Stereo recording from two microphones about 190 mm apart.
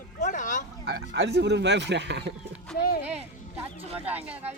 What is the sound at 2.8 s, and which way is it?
Speech, 55° left (ahead or behind).